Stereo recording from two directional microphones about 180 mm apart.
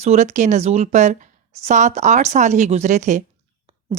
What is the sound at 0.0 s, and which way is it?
Speech, 40° right (ahead or behind).